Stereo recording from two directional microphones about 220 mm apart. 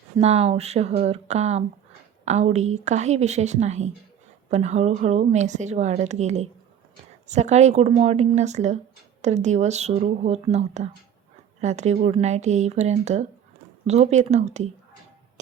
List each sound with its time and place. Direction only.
0.2 s a woman's voice: 30° right (ahead or behind)